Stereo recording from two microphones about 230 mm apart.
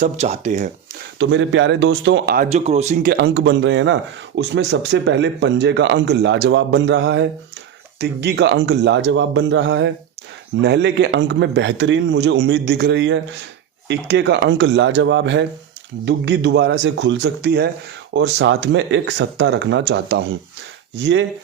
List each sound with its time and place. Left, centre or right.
0.0 s speech: right
1.2 s speech: right
3.1 s speech: right